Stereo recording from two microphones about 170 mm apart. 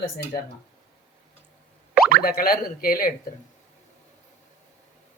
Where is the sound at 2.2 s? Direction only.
60° left (ahead or behind).